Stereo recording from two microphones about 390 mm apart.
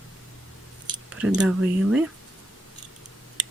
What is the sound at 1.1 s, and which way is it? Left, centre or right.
Speech, centre.